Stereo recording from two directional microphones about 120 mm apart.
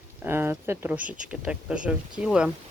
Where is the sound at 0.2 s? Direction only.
20° right (ahead or behind).